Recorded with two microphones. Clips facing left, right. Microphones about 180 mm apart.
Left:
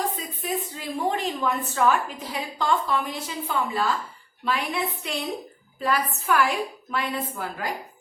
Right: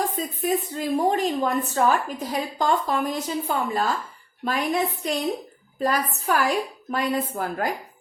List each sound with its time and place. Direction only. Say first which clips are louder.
0.2 s a woman's voice: right 5 dB; 45° right (ahead or behind)